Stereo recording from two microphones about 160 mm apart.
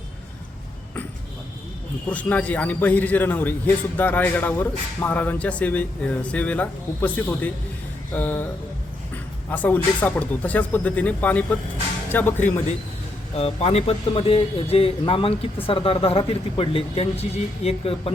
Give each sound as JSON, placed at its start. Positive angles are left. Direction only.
{"t": 2.0, "sound": "speech", "side_deg": 10}
{"t": 9.5, "sound": "speech", "side_deg": 10}
{"t": 13.3, "sound": "speech", "side_deg": 40}